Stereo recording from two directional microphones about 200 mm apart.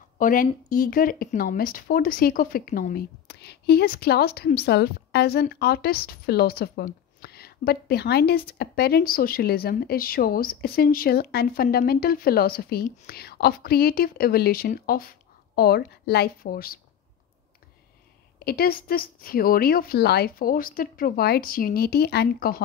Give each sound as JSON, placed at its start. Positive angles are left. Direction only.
{"t": 0.2, "sound": "speech", "side_deg": 45}
{"t": 18.4, "sound": "speech", "side_deg": 50}